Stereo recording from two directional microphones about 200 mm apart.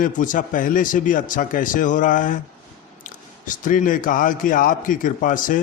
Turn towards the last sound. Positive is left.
turn(degrees=40)  # may be behind; listen again after turning